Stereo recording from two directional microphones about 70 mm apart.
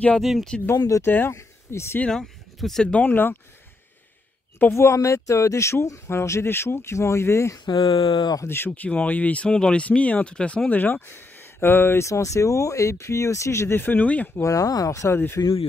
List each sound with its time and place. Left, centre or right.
0.2 s speech: centre
0.7 s speech: left
1.0 s speech: left
2.0 s speech: centre
2.9 s speech: left
4.7 s speech: left
7.6 s speech: left
8.5 s speech: left
10.7 s speech: left
12.1 s speech: left
14.3 s speech: left